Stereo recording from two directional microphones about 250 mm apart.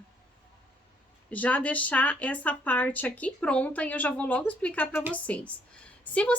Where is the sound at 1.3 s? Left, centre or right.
Centre.